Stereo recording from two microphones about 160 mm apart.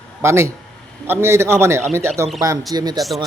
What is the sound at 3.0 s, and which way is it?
Speech, centre (ahead or behind).